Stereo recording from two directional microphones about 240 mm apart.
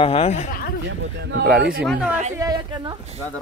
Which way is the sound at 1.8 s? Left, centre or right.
Centre.